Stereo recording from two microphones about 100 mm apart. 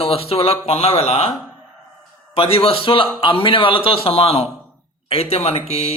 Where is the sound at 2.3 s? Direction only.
70° left (ahead or behind).